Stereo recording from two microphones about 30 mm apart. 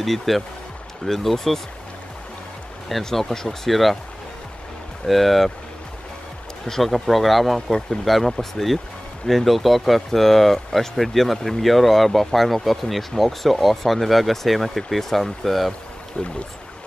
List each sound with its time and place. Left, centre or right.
0.0 s speech: centre
3.0 s speech: centre
5.0 s speech: centre
6.8 s speech: centre
16.1 s speech: left